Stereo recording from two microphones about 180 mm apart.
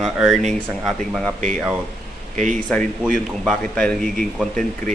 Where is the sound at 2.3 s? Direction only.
45° right (ahead or behind).